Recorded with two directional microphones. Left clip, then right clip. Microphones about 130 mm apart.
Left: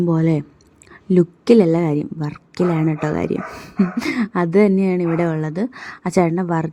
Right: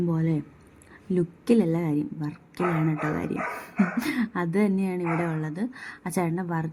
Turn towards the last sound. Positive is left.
turn(degrees=50)  # may be behind; listen again after turning